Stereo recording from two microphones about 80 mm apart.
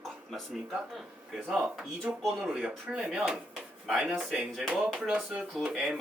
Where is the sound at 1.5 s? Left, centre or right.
Centre.